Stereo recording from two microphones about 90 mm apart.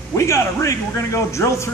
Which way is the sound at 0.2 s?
35° left (ahead or behind).